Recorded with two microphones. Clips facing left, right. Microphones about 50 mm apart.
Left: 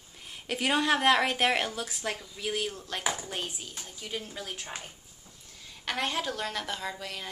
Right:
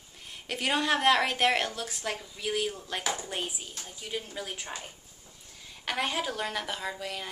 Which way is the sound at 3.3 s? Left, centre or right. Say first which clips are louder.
Right 1 dB; centre.